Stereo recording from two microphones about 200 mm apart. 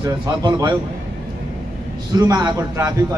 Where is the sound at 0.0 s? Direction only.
20° right (ahead or behind).